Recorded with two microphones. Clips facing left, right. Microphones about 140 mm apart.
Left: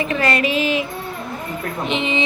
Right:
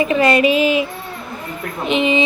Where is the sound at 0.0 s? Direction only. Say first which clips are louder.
Right 6 dB; 15° right (ahead or behind).